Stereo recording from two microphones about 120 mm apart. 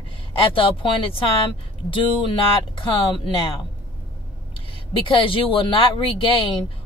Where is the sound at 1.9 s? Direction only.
45° left (ahead or behind).